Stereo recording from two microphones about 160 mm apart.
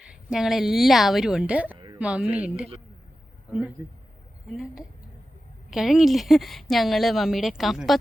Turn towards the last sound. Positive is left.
turn(degrees=0)  # may be behind; listen again after turning